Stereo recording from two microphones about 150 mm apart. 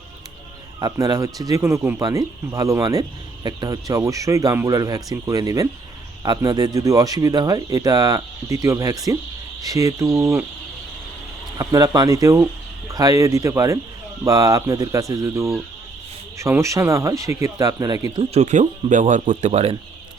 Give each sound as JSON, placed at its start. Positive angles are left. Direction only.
{"t": 0.8, "sound": "speech", "side_deg": -25}
{"t": 11.5, "sound": "speech", "side_deg": -25}
{"t": 18.2, "sound": "speech", "side_deg": -45}